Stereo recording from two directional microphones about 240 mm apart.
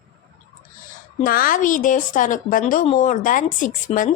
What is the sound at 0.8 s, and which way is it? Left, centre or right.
A woman's voice, left.